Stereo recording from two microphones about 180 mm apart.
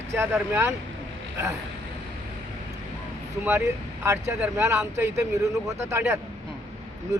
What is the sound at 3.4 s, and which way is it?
Speech, 10° right (ahead or behind).